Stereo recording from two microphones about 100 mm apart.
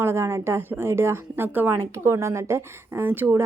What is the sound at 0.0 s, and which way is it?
A woman's voice, 25° right (ahead or behind).